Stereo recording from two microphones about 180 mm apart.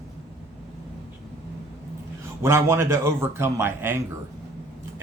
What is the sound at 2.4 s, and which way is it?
Speech, 15° right (ahead or behind).